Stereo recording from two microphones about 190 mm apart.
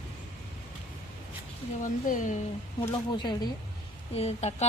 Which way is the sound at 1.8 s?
45° left (ahead or behind).